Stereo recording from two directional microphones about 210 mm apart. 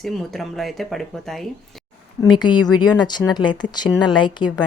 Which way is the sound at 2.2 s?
20° left (ahead or behind).